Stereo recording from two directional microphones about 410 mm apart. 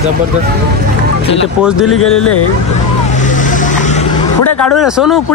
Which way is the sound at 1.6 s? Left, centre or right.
Centre.